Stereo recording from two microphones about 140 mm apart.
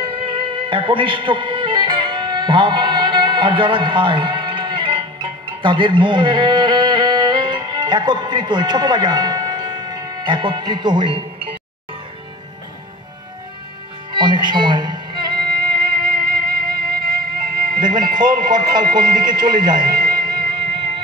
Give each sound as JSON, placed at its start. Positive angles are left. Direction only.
{"t": 0.1, "sound": "music", "side_deg": -40}
{"t": 14.1, "sound": "music", "side_deg": -35}
{"t": 16.3, "sound": "music", "side_deg": -90}
{"t": 17.7, "sound": "speech", "side_deg": -30}